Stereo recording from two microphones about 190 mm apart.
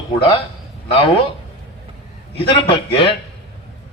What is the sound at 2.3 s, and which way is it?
Speech, 30° left (ahead or behind).